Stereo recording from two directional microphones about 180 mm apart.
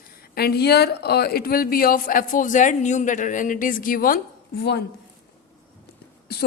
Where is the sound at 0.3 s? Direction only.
60° left (ahead or behind).